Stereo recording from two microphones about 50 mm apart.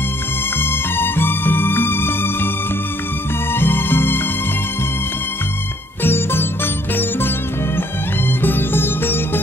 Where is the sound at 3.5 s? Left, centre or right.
Left.